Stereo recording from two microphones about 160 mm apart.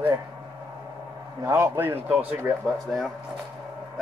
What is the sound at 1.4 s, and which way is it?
Speech, 20° right (ahead or behind).